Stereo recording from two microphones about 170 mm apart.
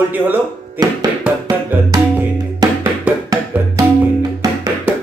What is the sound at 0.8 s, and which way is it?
Music, 20° right (ahead or behind).